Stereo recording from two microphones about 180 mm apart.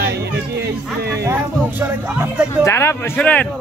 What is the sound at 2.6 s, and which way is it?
Speech, 15° left (ahead or behind).